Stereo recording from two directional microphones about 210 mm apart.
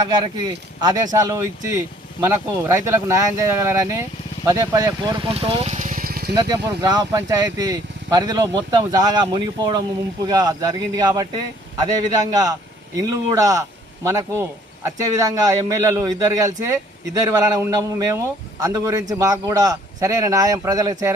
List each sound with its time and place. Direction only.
0.8 s a man's voice: 20° right (ahead or behind); by 6.2 s 40° right (ahead or behind)
6.3 s a man's voice: 20° right (ahead or behind)
12.3 s a man's voice: 15° right (ahead or behind)